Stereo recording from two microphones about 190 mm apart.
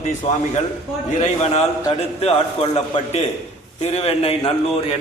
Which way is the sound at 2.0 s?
35° left (ahead or behind).